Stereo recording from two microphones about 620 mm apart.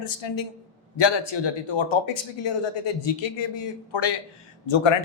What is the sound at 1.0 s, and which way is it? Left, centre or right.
Speech, left.